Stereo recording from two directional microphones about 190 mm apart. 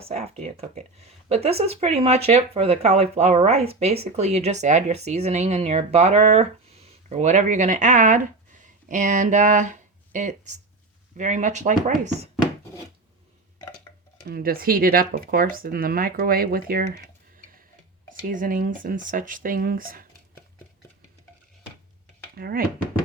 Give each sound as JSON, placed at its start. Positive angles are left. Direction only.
{"t": 0.0, "sound": "speech", "side_deg": -35}
{"t": 14.3, "sound": "speech", "side_deg": -55}
{"t": 18.1, "sound": "speech", "side_deg": -45}
{"t": 22.4, "sound": "speech", "side_deg": -50}